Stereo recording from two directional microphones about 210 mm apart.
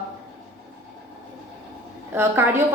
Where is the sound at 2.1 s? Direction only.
10° right (ahead or behind).